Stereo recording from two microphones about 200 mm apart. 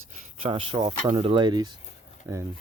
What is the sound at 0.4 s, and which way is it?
Speech, 25° right (ahead or behind).